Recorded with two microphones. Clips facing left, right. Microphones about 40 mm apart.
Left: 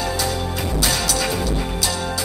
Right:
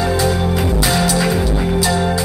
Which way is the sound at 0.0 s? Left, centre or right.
Centre.